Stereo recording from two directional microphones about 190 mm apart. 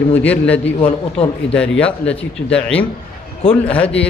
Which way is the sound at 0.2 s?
10° left (ahead or behind).